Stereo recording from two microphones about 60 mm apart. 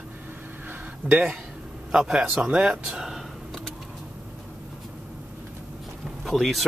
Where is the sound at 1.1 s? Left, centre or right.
Right.